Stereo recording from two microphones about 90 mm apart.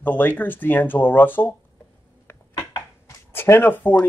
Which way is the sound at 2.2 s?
25° left (ahead or behind).